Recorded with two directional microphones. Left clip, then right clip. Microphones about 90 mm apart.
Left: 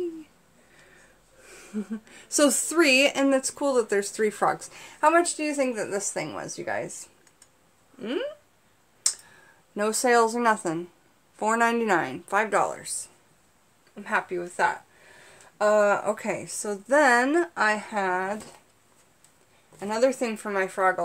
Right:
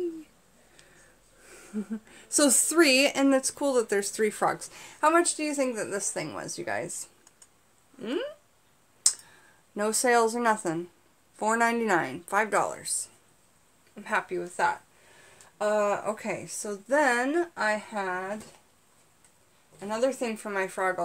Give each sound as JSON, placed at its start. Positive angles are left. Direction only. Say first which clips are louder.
{"t": 1.4, "sound": "speech", "louder": "left 2 dB", "side_deg": -25}
{"t": 9.0, "sound": "tick", "louder": "right 1 dB", "side_deg": -15}
{"t": 9.8, "sound": "speech", "louder": "left 2 dB", "side_deg": 0}
{"t": 14.0, "sound": "speech", "louder": "left 2 dB", "side_deg": -25}
{"t": 15.5, "sound": "a woman's voice", "louder": "left 5 dB", "side_deg": 45}
{"t": 17.3, "sound": "speech", "louder": "left 4 dB", "side_deg": 45}
{"t": 20.2, "sound": "a woman's voice", "louder": "left 3 dB", "side_deg": 20}
{"t": 20.4, "sound": "speech", "louder": "left 4 dB", "side_deg": -5}